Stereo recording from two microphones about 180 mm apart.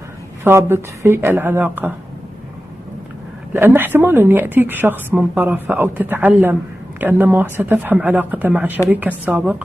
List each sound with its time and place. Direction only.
0.4 s a woman's voice: 15° right (ahead or behind)
3.5 s a woman's voice: 10° right (ahead or behind)